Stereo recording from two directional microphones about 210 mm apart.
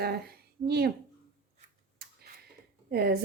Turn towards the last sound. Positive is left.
turn(degrees=-50)  # may be behind; listen again after turning